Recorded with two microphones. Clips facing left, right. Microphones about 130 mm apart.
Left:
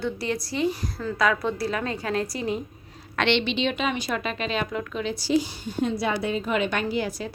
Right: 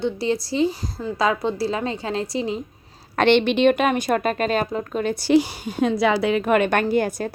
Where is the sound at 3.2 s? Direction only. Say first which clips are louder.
Right 7 dB; 45° right (ahead or behind).